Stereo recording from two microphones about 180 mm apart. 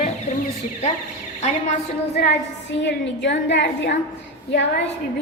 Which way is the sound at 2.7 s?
80° left.